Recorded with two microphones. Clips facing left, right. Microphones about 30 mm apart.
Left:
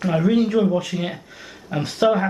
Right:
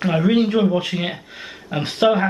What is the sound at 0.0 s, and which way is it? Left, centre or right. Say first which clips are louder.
Speech: right 1 dB; right.